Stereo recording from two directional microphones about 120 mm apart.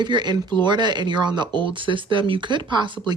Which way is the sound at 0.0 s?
40° right (ahead or behind).